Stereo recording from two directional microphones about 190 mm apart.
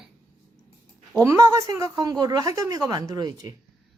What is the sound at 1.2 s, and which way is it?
A woman's voice, 15° right (ahead or behind).